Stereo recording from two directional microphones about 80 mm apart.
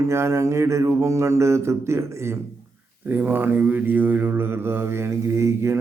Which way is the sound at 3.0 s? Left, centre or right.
Right.